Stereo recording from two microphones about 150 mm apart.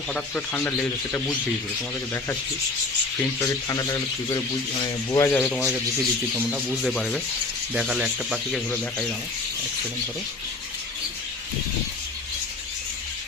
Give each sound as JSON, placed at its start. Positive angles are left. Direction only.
{"t": 0.1, "sound": "a man's voice", "side_deg": 15}
{"t": 3.4, "sound": "speech", "side_deg": 25}
{"t": 5.5, "sound": "speech", "side_deg": 0}
{"t": 6.8, "sound": "speech", "side_deg": 5}